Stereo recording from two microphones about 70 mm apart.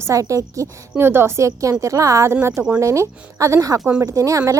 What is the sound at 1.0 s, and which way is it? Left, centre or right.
A woman's voice, right.